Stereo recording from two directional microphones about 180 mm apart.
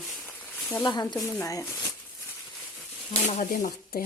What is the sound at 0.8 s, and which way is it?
Speech, 25° left (ahead or behind).